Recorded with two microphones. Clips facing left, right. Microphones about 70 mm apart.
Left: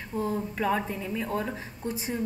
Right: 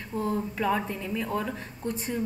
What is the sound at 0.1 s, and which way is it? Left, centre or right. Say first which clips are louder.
A woman's voice: right 1 dB; centre.